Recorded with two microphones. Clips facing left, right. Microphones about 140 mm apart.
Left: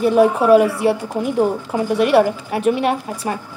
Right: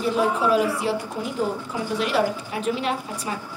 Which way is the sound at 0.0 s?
60° left (ahead or behind).